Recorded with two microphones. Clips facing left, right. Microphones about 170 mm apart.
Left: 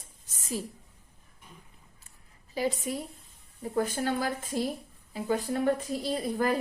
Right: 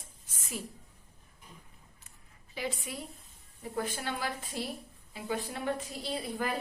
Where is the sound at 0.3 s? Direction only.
40° left (ahead or behind).